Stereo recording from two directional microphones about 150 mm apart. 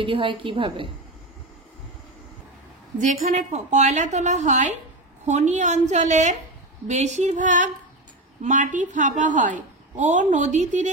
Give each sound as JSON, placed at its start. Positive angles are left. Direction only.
{"t": 0.0, "sound": "a woman's voice", "side_deg": -35}
{"t": 3.3, "sound": "a woman's voice", "side_deg": -50}